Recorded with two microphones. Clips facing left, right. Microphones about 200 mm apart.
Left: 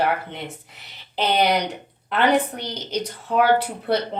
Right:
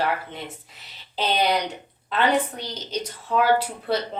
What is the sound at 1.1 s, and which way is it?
A woman's voice, 15° left (ahead or behind).